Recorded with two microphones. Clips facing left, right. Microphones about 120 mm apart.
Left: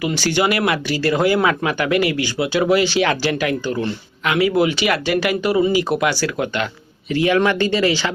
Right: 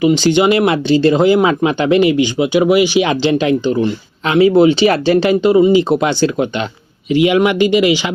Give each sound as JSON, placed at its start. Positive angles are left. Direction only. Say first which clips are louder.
{"t": 0.0, "sound": "speech", "louder": "right 8 dB", "side_deg": -20}